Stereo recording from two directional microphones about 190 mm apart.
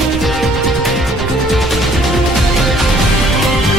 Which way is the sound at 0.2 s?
Centre (ahead or behind).